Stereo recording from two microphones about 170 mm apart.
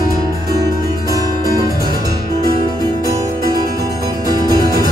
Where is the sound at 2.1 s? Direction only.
20° right (ahead or behind).